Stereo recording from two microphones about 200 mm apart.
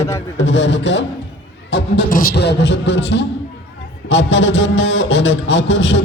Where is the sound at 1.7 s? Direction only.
50° left (ahead or behind).